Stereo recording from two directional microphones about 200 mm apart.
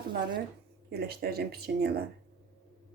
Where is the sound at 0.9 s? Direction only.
55° right (ahead or behind).